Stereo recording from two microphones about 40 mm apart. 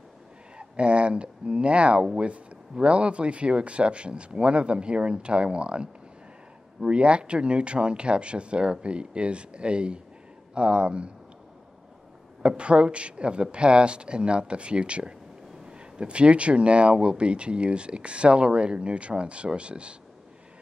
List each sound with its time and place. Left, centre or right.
0.6 s speech: right
6.9 s speech: right
12.4 s speech: right